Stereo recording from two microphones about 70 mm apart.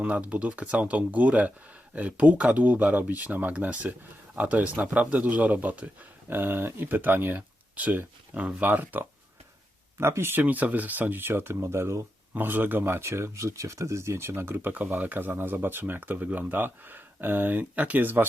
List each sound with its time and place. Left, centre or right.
0.0 s speech: centre
10.4 s speech: right
12.3 s speech: right